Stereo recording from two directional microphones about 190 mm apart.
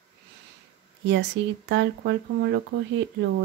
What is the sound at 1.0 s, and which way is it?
Speech, 70° right (ahead or behind).